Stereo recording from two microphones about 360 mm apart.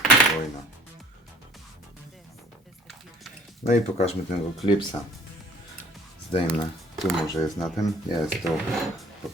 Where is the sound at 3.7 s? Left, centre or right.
Centre.